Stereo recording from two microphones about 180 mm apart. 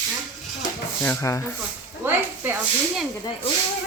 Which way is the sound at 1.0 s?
15° left (ahead or behind).